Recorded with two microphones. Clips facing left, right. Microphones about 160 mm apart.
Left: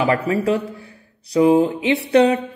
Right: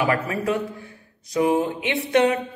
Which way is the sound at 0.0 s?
30° left (ahead or behind).